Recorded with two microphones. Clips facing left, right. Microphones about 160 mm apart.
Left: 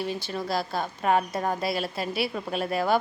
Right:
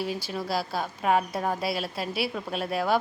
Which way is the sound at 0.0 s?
5° right (ahead or behind).